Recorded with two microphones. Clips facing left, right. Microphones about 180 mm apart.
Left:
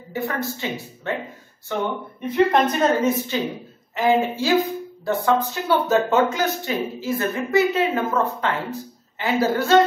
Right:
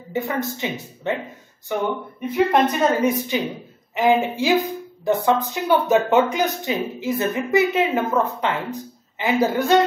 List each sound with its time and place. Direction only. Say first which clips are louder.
0.1 s a woman's voice: right 2 dB; 20° right (ahead or behind)